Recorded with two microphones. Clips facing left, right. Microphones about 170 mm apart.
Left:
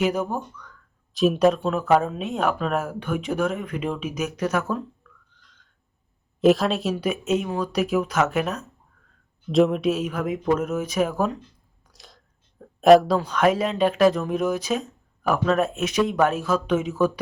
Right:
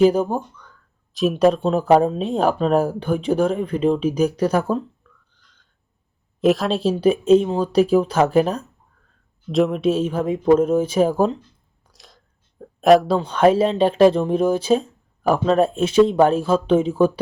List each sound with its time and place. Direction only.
0.0 s speech: 30° right (ahead or behind)
1.1 s speech: centre (ahead or behind)
1.5 s speech: 30° right (ahead or behind)
5.4 s a sound: centre (ahead or behind)
6.4 s speech: centre (ahead or behind)
6.7 s speech: 30° right (ahead or behind)
9.5 s speech: centre (ahead or behind)
9.8 s speech: 30° right (ahead or behind)
11.9 s chewing: centre (ahead or behind)
12.8 s speech: centre (ahead or behind)
13.1 s speech: 30° right (ahead or behind)